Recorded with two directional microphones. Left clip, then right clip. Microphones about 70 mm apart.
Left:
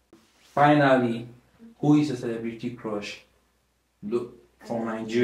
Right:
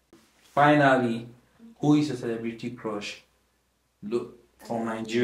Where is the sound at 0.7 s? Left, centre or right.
Right.